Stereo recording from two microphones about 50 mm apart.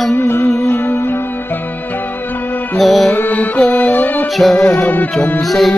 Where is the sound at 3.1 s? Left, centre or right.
Left.